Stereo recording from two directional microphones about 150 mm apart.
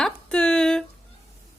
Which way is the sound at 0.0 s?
5° left (ahead or behind).